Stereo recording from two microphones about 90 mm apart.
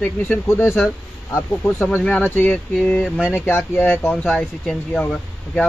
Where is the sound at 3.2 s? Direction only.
20° left (ahead or behind).